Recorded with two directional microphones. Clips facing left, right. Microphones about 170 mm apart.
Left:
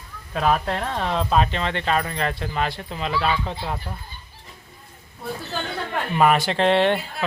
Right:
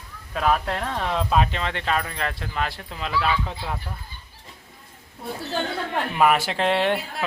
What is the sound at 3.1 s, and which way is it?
Speech, 30° left (ahead or behind).